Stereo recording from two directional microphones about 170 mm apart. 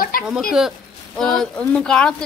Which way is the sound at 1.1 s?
5° left (ahead or behind).